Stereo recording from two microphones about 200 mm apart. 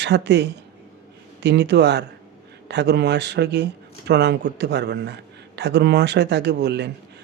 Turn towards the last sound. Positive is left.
turn(degrees=-55)  # may be behind; listen again after turning